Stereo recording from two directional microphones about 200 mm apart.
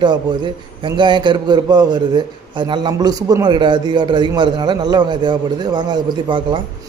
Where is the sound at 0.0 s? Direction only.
20° right (ahead or behind).